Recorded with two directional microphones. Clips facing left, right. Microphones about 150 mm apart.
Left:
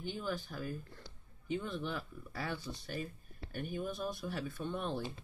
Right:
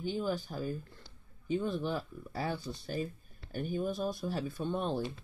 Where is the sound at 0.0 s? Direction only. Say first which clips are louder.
Right 5 dB; 35° right (ahead or behind).